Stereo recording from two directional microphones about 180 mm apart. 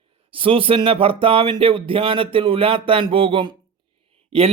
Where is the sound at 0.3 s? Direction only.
30° right (ahead or behind).